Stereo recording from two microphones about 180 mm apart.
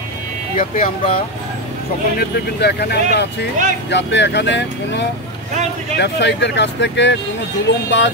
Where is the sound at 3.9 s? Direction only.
75° left (ahead or behind).